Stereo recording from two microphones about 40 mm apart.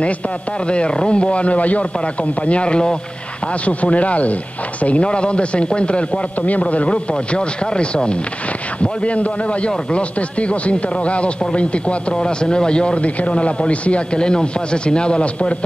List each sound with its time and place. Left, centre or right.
0.7 s a man's voice: left
3.6 s a man's voice: left
6.4 s a man's voice: left